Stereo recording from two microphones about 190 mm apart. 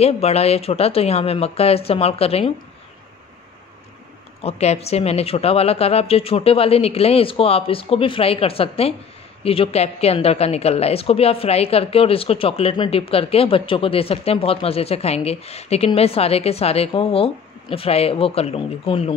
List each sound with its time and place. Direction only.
0.0 s a woman's voice: 35° left (ahead or behind)
4.4 s a woman's voice: 35° left (ahead or behind)